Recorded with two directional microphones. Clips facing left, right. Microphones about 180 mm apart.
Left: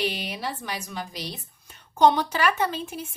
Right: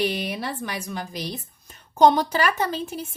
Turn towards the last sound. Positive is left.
turn(degrees=-40)  # may be behind; listen again after turning